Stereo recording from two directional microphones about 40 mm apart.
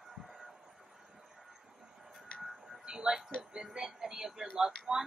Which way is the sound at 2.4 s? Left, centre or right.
Centre.